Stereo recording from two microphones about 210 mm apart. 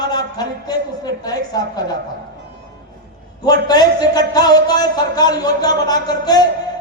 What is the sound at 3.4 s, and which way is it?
A man's voice, 20° left (ahead or behind).